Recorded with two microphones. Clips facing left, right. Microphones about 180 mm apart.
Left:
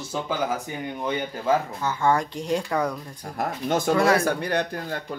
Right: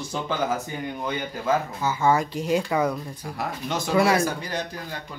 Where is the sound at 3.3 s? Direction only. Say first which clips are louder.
Left 5 dB; 50° left (ahead or behind).